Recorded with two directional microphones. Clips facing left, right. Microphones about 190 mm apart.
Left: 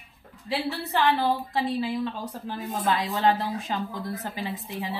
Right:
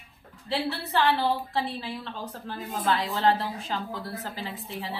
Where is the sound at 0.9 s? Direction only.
15° left (ahead or behind).